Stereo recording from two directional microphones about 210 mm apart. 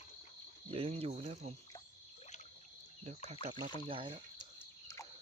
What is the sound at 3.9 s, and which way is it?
Speech, 25° right (ahead or behind).